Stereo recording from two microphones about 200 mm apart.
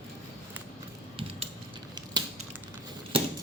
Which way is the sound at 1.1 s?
30° right (ahead or behind).